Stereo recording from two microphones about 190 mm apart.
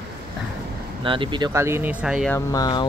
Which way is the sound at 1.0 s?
25° right (ahead or behind).